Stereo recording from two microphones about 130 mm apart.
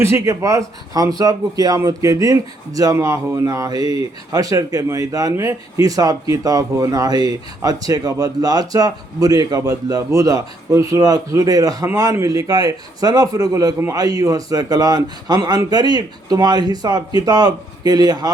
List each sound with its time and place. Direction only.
0.0 s speech: 20° right (ahead or behind)